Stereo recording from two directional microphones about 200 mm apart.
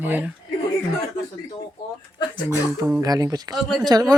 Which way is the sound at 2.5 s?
15° right (ahead or behind).